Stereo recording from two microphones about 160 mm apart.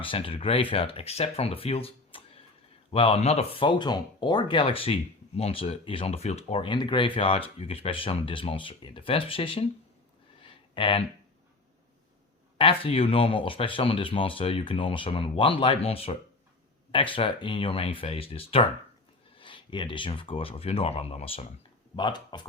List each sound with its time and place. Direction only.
0.0 s speech: 35° left (ahead or behind)
10.4 s a sound: 35° left (ahead or behind)
12.5 s speech: 35° left (ahead or behind)
21.9 s speech: 30° left (ahead or behind)